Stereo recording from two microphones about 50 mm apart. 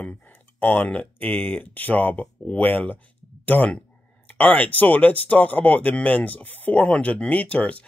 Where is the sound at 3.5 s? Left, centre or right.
Left.